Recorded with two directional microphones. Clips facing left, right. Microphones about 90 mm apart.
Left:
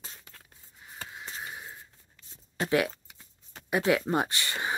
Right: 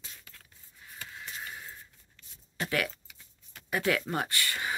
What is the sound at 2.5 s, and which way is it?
Speech, 25° left (ahead or behind).